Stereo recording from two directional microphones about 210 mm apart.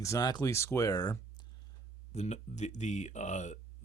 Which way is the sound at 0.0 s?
15° left (ahead or behind).